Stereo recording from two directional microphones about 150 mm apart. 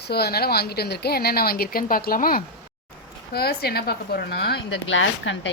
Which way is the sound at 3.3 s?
90° left.